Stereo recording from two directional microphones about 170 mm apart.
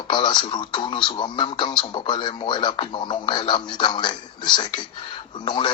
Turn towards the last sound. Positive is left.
turn(degrees=30)  # may be behind; listen again after turning